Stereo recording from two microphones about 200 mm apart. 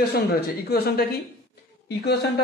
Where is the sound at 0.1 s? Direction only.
50° left (ahead or behind).